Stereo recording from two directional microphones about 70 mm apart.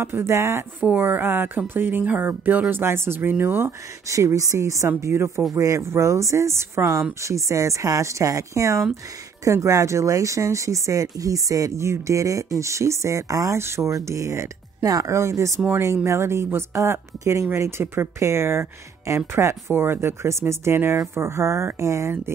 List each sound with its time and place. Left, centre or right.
0.0 s speech: right
0.8 s speech: right
4.1 s speech: right